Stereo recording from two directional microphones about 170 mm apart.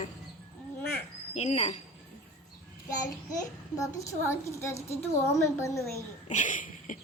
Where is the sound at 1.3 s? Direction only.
40° left (ahead or behind).